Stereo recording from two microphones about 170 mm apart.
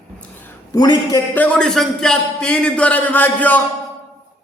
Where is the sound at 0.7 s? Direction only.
20° left (ahead or behind).